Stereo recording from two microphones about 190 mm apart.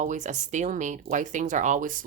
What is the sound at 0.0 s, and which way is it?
Speech, 40° right (ahead or behind).